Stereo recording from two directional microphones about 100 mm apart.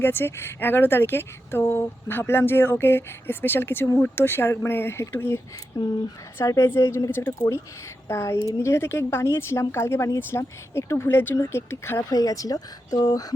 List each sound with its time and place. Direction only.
0.0 s speech: 20° left (ahead or behind)
6.4 s speech: 30° left (ahead or behind)
12.1 s speech: 35° left (ahead or behind)